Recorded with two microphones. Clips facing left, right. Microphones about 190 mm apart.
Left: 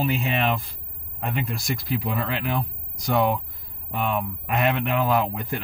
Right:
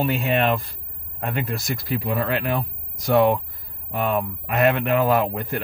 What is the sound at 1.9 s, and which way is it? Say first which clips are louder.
Speech: right 4 dB; 50° right (ahead or behind).